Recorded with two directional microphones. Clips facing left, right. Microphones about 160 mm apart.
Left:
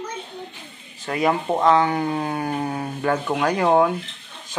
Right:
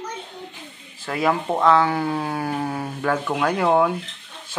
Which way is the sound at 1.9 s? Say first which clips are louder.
Even; 5° right (ahead or behind).